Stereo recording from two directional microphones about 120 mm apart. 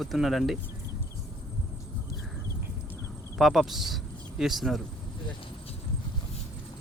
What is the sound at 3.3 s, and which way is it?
Speech, centre (ahead or behind).